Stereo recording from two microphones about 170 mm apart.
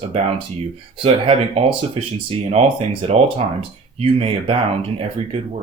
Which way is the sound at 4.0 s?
35° right (ahead or behind).